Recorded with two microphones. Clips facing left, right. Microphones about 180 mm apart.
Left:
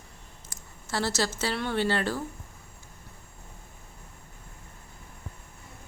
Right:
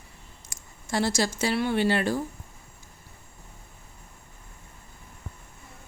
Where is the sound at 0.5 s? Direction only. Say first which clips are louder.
Right 4 dB; 15° right (ahead or behind).